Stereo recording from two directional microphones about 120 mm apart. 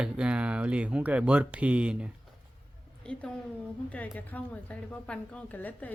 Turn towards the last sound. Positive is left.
turn(degrees=15)  # may be behind; listen again after turning